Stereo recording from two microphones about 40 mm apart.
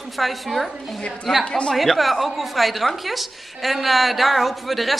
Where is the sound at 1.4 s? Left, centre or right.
Left.